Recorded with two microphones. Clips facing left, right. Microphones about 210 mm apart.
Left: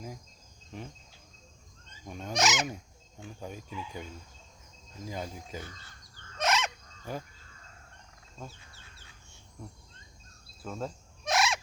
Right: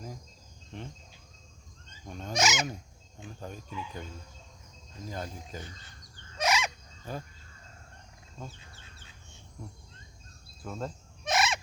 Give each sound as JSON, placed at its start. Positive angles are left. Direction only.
{"t": 2.0, "sound": "goose", "side_deg": 10}
{"t": 3.4, "sound": "speech", "side_deg": 10}
{"t": 5.0, "sound": "speech", "side_deg": 10}
{"t": 5.6, "sound": "bird", "side_deg": -20}
{"t": 6.4, "sound": "fowl", "side_deg": 0}
{"t": 7.1, "sound": "speech", "side_deg": 15}
{"t": 10.6, "sound": "fowl", "side_deg": 5}